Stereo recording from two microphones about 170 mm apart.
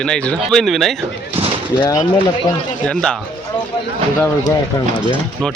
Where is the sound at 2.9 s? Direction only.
5° left (ahead or behind).